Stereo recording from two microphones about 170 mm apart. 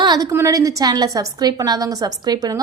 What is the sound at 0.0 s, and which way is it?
A woman's voice, 25° right (ahead or behind).